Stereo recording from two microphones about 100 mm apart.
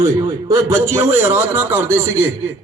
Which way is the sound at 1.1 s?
25° right (ahead or behind).